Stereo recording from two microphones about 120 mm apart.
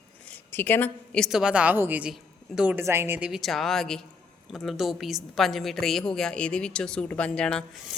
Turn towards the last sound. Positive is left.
turn(degrees=5)  # may be behind; listen again after turning